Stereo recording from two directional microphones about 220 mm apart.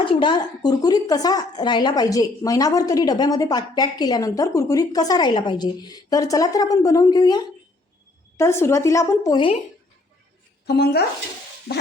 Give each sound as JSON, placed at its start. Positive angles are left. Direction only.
{"t": 0.0, "sound": "a woman's voice", "side_deg": 20}
{"t": 10.7, "sound": "speech", "side_deg": 45}